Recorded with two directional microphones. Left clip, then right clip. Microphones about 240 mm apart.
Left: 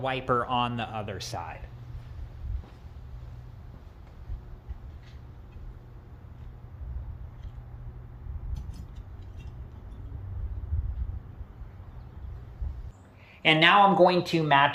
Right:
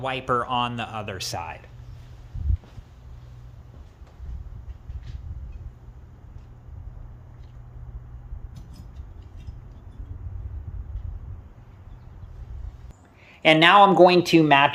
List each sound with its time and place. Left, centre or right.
0.0 s speech: centre; by 1.4 s right
13.4 s speech: right
14.0 s speech: right